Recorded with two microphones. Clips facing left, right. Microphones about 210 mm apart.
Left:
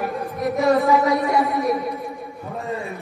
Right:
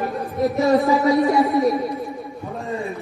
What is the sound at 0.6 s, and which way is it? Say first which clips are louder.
Speech: even; 30° right (ahead or behind).